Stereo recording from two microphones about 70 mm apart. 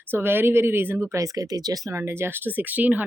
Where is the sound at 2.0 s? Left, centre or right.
Right.